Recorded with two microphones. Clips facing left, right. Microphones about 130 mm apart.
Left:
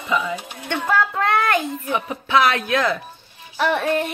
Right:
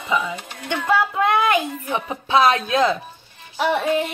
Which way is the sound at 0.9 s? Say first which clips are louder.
Right 1 dB; 10° right (ahead or behind).